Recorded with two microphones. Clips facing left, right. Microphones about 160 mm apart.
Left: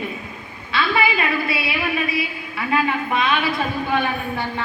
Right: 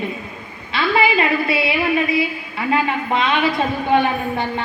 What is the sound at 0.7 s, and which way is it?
A woman's voice, 25° right (ahead or behind).